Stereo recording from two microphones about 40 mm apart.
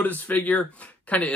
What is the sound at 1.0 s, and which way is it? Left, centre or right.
Speech, left.